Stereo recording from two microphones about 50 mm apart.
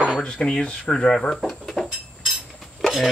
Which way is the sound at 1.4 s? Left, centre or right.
Centre.